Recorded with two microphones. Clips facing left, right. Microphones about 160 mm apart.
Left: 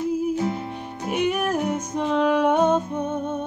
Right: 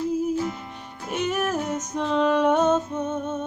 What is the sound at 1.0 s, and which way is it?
Music, 10° left (ahead or behind).